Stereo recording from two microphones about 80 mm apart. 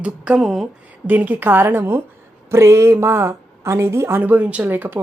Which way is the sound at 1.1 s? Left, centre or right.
Right.